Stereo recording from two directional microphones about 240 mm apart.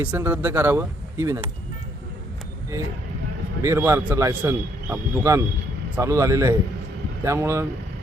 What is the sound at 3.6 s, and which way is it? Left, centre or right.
Speech, centre.